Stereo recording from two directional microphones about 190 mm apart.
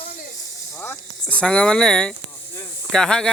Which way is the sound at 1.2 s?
5° left (ahead or behind).